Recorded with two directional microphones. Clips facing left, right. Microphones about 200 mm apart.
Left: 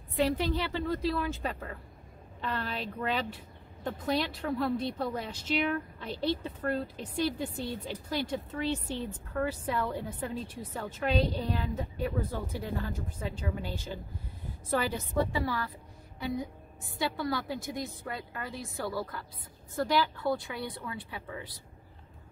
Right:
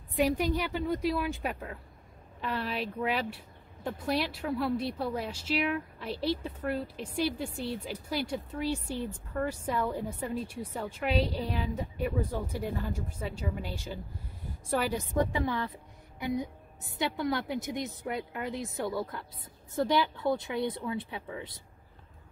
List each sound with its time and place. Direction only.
0.1 s a woman's voice: 15° right (ahead or behind)